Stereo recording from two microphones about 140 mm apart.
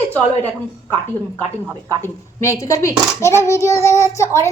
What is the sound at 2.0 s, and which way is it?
A woman's voice, 20° left (ahead or behind).